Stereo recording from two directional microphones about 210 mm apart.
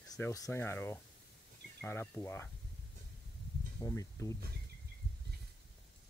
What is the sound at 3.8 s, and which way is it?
Speech, 15° left (ahead or behind).